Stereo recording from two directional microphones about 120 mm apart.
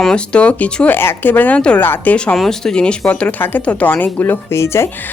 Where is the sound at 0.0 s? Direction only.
5° left (ahead or behind).